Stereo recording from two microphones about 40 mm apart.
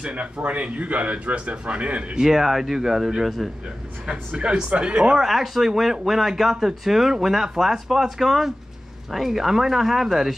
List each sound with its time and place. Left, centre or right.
0.0 s speech: right
2.1 s speech: centre
4.4 s speech: right
5.2 s speech: centre